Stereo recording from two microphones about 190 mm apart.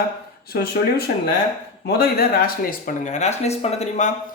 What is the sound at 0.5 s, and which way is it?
Speech, 55° left (ahead or behind).